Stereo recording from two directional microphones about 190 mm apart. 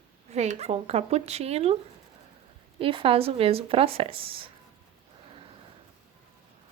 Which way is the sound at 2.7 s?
30° right (ahead or behind).